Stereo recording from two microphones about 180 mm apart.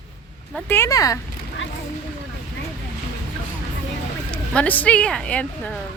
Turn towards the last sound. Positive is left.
turn(degrees=5)  # may be behind; listen again after turning